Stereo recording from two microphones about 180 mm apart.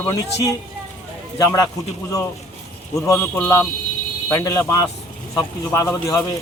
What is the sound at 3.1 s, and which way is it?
Speech, 15° left (ahead or behind).